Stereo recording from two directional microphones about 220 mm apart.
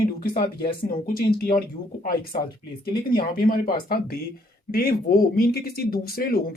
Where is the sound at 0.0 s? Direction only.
40° left (ahead or behind).